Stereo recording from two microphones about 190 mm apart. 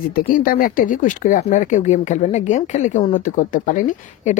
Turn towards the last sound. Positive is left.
turn(degrees=40)  # may be behind; listen again after turning